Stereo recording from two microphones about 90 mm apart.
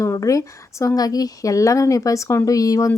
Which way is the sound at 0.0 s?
35° left (ahead or behind).